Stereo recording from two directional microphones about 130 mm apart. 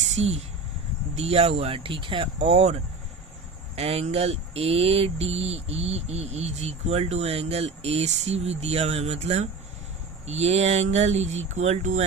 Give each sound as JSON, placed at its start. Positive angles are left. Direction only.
{"t": 0.1, "sound": "speech", "side_deg": -55}